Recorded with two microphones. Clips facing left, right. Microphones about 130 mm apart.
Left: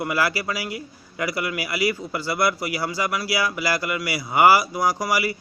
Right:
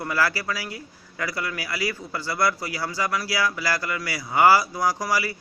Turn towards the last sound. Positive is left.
turn(degrees=15)  # may be behind; listen again after turning